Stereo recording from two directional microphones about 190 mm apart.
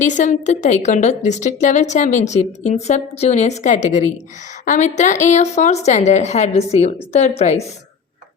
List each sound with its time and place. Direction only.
0.0 s a woman's voice: 40° left (ahead or behind)